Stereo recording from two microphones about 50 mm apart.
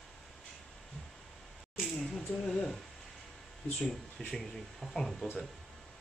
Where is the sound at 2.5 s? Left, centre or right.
Centre.